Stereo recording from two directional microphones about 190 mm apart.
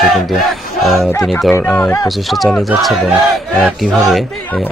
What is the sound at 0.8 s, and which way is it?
Speech, centre (ahead or behind).